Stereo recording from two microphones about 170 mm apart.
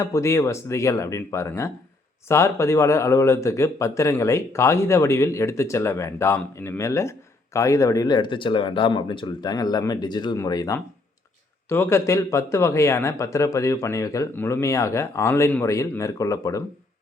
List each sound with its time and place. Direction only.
0.0 s speech: 15° left (ahead or behind)